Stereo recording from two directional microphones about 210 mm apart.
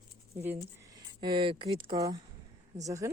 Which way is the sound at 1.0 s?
20° right (ahead or behind).